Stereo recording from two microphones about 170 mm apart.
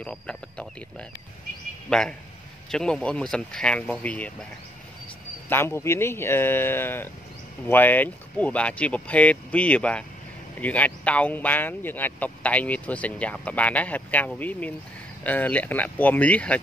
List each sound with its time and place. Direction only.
0.0 s speech: 5° left (ahead or behind)
5.5 s speech: 15° left (ahead or behind)